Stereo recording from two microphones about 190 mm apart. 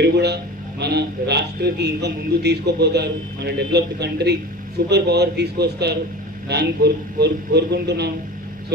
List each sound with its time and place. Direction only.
0.0 s a man's voice: 60° right (ahead or behind)